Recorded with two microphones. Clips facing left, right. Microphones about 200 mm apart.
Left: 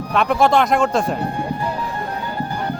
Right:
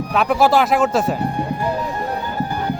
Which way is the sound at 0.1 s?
5° right (ahead or behind).